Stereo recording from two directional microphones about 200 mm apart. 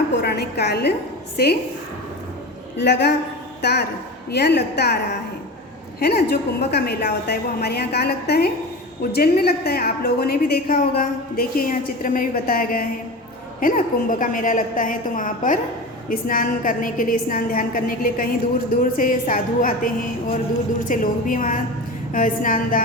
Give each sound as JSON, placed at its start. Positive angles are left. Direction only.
{"t": 0.2, "sound": "a woman's voice", "side_deg": 55}
{"t": 2.7, "sound": "a woman's voice", "side_deg": 60}
{"t": 6.0, "sound": "a woman's voice", "side_deg": 50}